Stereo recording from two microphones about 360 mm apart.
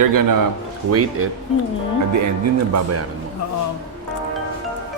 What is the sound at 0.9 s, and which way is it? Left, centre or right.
Speech, right.